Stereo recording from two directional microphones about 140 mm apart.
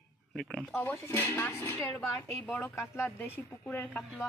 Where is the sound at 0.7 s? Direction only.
15° left (ahead or behind).